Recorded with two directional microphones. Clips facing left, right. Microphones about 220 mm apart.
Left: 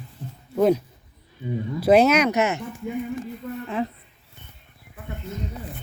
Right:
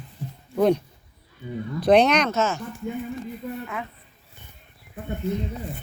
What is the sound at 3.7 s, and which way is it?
Speech, 30° left (ahead or behind).